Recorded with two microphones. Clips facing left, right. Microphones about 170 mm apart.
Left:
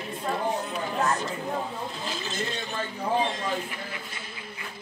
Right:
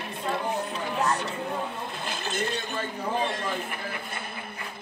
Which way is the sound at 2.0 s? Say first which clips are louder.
Right 5 dB; 60° right (ahead or behind).